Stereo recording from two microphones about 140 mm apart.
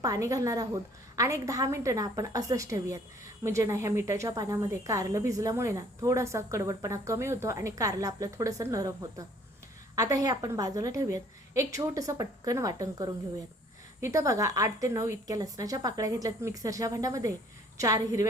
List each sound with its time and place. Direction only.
0.0 s speech: 25° right (ahead or behind)